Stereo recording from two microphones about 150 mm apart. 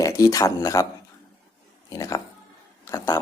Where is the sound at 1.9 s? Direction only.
25° left (ahead or behind).